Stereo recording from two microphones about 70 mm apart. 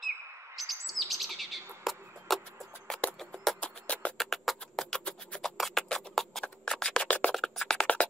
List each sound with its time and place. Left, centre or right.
0.6 s chirp: centre
3.2 s music: centre
3.6 s music: centre
4.2 s music: centre
6.4 s a sound: centre
7.3 s music: centre